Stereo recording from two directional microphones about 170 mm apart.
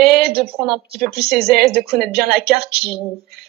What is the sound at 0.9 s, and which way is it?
A woman's voice, 65° right (ahead or behind).